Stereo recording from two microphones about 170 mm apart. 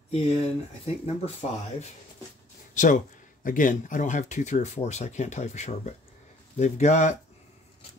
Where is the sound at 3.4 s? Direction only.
50° left (ahead or behind).